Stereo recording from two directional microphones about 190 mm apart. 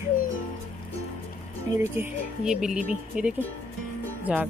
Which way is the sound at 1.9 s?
5° right (ahead or behind).